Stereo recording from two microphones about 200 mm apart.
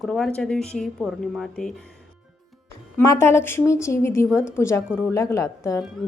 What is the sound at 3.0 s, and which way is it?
Speech, 15° left (ahead or behind).